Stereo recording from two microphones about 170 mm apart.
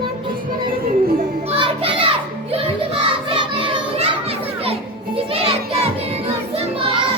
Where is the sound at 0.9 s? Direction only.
60° right (ahead or behind).